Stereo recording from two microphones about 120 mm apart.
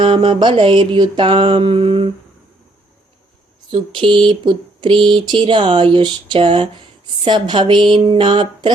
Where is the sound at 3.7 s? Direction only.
45° right (ahead or behind).